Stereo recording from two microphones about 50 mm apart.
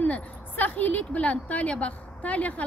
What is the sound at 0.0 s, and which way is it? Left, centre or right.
A woman's voice, left.